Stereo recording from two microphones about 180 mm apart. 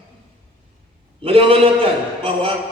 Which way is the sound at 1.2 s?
30° right (ahead or behind).